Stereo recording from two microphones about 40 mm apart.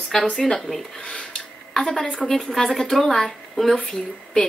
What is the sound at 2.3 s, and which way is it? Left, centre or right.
A woman's voice, centre.